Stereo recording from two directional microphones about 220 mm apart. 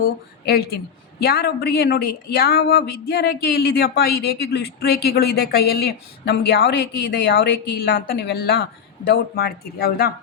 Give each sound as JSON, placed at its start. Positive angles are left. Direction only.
{"t": 0.0, "sound": "a woman's voice", "side_deg": 45}